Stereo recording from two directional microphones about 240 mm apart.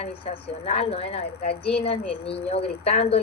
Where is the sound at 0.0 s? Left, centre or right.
Left.